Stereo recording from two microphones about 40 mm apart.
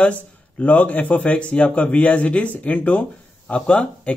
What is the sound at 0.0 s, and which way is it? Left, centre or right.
Speech, left.